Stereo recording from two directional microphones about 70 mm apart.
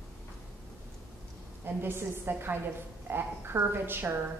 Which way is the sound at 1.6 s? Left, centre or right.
Right.